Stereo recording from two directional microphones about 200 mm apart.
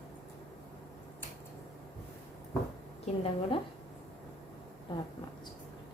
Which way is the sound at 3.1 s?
35° left (ahead or behind).